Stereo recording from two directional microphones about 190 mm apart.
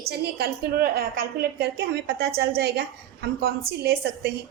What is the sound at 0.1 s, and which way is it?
A woman's voice, 55° right (ahead or behind).